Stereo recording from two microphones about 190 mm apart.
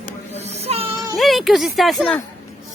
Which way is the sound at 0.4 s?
35° right (ahead or behind).